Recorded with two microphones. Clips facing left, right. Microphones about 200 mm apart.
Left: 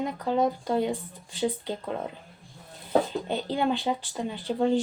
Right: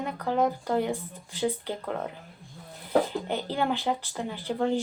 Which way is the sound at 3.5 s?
20° left (ahead or behind).